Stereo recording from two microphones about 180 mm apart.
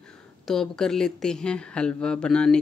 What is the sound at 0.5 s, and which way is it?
Speech, 5° left (ahead or behind).